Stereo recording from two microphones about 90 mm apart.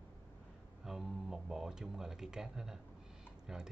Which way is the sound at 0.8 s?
5° right (ahead or behind).